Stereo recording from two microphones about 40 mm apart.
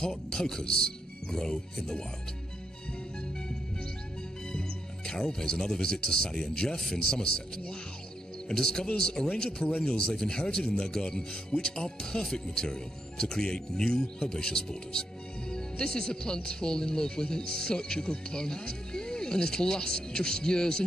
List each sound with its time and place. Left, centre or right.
0.0 s speech: centre
4.5 s speech: centre